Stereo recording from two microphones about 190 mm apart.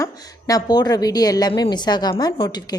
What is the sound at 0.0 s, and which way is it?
A woman's voice, 20° left (ahead or behind).